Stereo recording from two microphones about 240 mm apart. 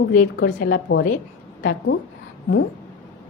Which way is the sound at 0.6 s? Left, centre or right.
Left.